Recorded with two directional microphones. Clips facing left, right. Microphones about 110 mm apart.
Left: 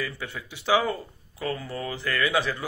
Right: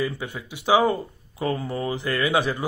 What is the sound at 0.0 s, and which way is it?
Speech, 15° right (ahead or behind).